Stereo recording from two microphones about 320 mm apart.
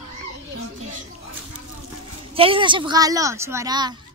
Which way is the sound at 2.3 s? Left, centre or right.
Centre.